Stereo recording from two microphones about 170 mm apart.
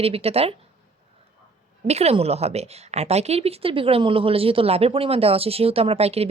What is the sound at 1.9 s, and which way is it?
A woman's voice, 40° right (ahead or behind).